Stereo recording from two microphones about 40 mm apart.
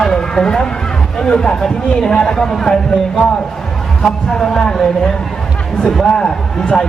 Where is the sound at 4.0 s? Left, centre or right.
Centre.